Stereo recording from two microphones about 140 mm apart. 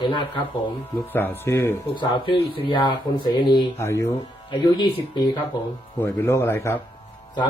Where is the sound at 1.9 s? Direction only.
35° left (ahead or behind).